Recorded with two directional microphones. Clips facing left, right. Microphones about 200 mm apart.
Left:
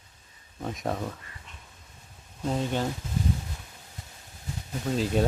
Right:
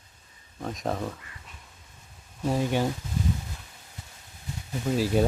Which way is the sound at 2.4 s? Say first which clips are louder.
Right 2 dB; 10° right (ahead or behind).